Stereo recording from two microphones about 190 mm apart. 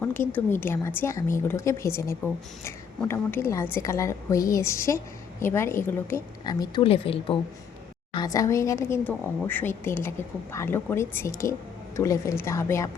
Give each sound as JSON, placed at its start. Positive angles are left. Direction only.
{"t": 0.0, "sound": "a woman's voice", "side_deg": 10}